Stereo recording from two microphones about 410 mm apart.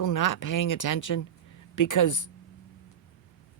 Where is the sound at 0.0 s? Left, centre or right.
Left.